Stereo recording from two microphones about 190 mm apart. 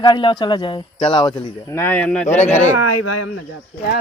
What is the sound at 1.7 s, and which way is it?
Speech, 10° left (ahead or behind).